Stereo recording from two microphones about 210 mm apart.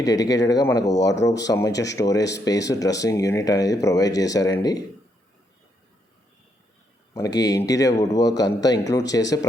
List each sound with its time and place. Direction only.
0.0 s speech: 15° left (ahead or behind)
7.1 s speech: 15° left (ahead or behind)